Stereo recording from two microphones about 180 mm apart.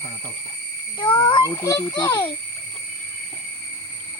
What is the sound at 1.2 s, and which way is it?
Speech, 20° left (ahead or behind).